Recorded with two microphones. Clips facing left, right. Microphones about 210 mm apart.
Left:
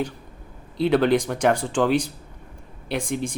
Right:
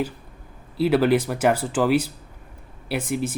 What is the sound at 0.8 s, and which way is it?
Speech, 5° right (ahead or behind).